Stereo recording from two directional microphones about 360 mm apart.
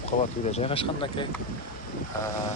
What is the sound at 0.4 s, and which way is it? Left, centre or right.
Speech, centre.